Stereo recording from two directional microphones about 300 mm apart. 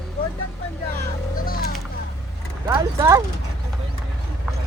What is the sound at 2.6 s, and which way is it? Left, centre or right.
Speech, centre.